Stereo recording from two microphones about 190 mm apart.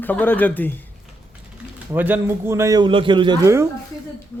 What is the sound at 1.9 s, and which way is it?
A man's voice, 10° right (ahead or behind).